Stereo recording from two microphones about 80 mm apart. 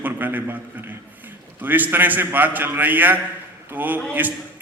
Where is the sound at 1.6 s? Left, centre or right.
Right.